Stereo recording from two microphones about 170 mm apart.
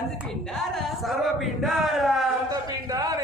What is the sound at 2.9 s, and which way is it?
Speech, 20° right (ahead or behind).